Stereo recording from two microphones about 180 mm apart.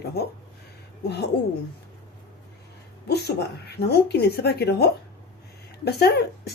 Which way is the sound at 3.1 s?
65° left (ahead or behind).